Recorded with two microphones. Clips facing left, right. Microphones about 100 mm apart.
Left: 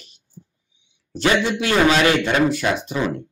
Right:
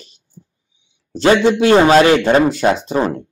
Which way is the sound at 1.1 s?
30° right (ahead or behind).